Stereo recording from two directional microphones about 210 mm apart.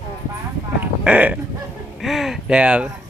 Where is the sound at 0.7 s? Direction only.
5° right (ahead or behind).